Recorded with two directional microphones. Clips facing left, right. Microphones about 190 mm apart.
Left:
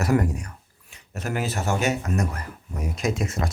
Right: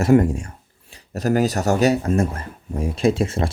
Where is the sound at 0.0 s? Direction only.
25° right (ahead or behind).